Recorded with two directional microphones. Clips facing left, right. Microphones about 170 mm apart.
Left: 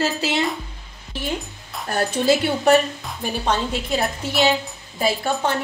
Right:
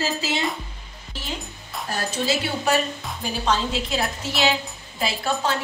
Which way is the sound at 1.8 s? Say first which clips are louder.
Left 6 dB; 55° left (ahead or behind).